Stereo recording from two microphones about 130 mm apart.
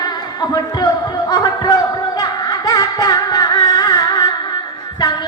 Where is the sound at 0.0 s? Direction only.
30° left (ahead or behind).